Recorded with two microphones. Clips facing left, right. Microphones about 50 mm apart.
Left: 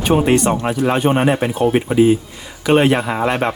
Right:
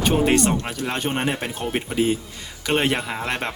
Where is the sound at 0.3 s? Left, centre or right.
Centre.